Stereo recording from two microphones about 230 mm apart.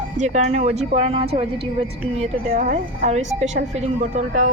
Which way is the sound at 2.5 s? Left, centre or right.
Right.